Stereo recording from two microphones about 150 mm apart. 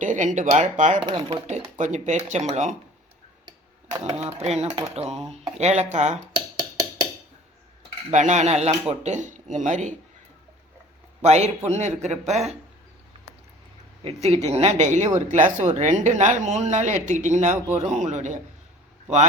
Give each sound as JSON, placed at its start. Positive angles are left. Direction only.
{"t": 0.0, "sound": "speech", "side_deg": -55}
{"t": 0.9, "sound": "speech", "side_deg": -30}
{"t": 1.7, "sound": "speech", "side_deg": -50}
{"t": 4.0, "sound": "speech", "side_deg": -40}
{"t": 6.3, "sound": "a sound", "side_deg": -25}
{"t": 8.1, "sound": "speech", "side_deg": -50}
{"t": 11.2, "sound": "speech", "side_deg": -45}
{"t": 14.0, "sound": "speech", "side_deg": -45}